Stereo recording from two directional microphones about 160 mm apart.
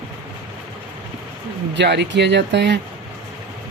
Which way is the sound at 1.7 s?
90° right.